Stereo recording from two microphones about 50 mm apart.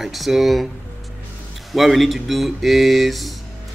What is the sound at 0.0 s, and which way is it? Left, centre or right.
Speech, centre.